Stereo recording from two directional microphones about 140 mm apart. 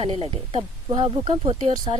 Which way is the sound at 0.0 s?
45° right (ahead or behind).